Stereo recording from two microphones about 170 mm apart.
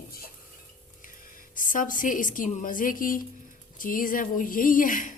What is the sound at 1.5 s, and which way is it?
A woman's voice, 50° left (ahead or behind).